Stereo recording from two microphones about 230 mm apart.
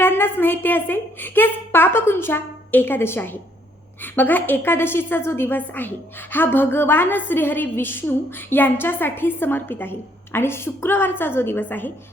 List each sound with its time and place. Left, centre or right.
0.0 s a woman's voice: centre